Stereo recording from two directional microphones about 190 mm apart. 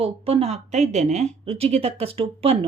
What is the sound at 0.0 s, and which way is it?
Speech, 30° right (ahead or behind).